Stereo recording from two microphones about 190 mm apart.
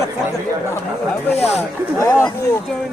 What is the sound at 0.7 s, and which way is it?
Speech, 10° left (ahead or behind).